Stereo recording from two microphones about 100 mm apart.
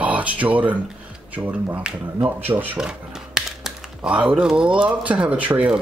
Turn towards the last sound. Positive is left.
turn(degrees=-15)  # may be behind; listen again after turning